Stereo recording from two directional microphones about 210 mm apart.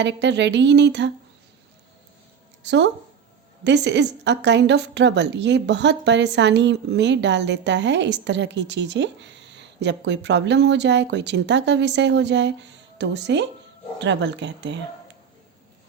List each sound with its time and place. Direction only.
0.0 s a woman's voice: 55° right (ahead or behind)
2.6 s a woman's voice: 55° right (ahead or behind)